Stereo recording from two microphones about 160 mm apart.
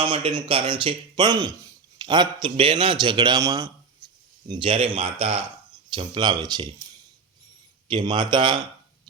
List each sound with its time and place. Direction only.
0.0 s speech: 35° right (ahead or behind)
4.4 s a man's voice: 30° right (ahead or behind)
7.9 s speech: 30° right (ahead or behind)